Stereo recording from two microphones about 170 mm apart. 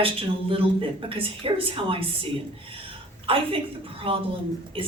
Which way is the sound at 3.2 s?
30° right (ahead or behind).